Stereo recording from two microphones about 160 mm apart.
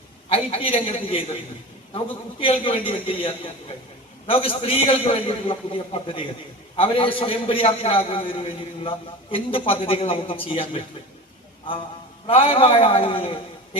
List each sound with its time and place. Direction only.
0.3 s a man's voice: 35° left (ahead or behind)
2.4 s a man's voice: 35° left (ahead or behind)
12.2 s a man's voice: 35° left (ahead or behind)